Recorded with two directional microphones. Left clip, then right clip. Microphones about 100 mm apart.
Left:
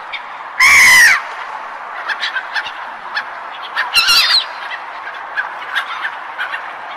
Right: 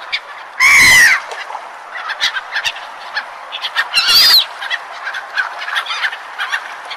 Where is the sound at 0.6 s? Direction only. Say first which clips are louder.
Even; centre (ahead or behind).